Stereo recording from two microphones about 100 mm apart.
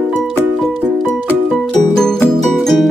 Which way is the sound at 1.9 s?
5° left (ahead or behind).